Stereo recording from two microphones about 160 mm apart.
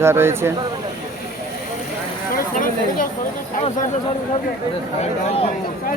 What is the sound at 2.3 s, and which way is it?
Chatter, 60° left (ahead or behind).